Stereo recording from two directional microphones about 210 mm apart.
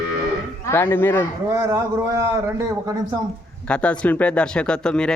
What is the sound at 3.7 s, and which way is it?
Speech, 5° left (ahead or behind).